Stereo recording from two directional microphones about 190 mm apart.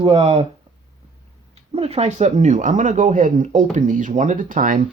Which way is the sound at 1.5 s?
30° right (ahead or behind).